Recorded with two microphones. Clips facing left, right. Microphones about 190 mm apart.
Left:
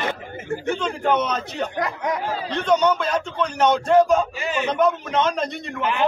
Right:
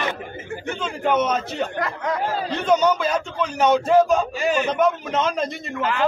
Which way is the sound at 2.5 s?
5° right (ahead or behind).